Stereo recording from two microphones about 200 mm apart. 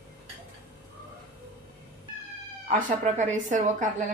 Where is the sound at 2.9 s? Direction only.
40° right (ahead or behind).